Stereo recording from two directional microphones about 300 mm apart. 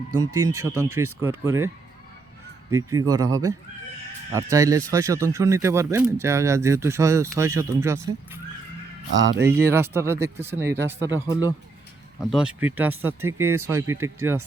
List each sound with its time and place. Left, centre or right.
0.2 s speech: centre
9.1 s speech: right
9.4 s speech: centre
12.2 s speech: centre